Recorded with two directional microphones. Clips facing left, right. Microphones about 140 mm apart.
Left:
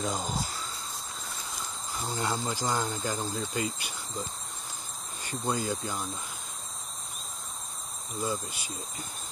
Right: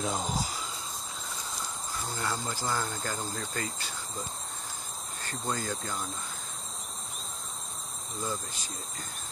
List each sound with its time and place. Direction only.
0.0 s a sound: centre (ahead or behind)
2.0 s speech: 15° left (ahead or behind)
5.2 s speech: 10° left (ahead or behind)
8.2 s speech: 15° left (ahead or behind)